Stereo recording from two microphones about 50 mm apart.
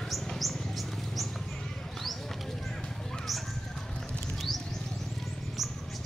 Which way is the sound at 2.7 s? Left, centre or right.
Centre.